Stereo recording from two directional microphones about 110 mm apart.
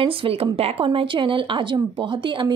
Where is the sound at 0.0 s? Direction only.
60° right (ahead or behind).